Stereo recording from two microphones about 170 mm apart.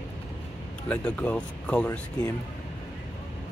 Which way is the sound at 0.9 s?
10° left (ahead or behind).